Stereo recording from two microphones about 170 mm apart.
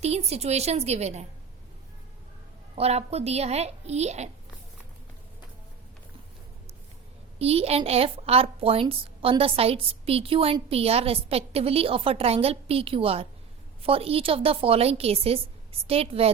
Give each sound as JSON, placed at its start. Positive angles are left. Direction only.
{"t": 0.0, "sound": "a woman's voice", "side_deg": -40}
{"t": 2.7, "sound": "a woman's voice", "side_deg": -35}
{"t": 7.3, "sound": "a woman's voice", "side_deg": -35}